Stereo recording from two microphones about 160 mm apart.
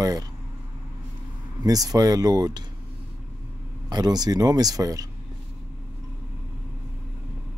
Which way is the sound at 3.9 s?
25° right (ahead or behind).